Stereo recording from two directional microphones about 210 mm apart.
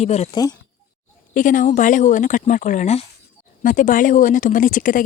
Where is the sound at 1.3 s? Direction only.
40° left (ahead or behind).